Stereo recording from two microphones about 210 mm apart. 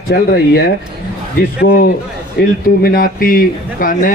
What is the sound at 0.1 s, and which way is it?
A man's voice, 50° left (ahead or behind).